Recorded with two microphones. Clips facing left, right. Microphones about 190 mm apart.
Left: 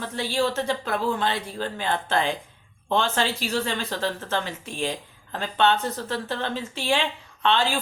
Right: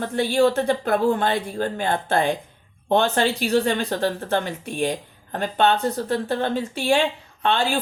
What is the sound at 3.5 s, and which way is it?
Speech, 55° right (ahead or behind).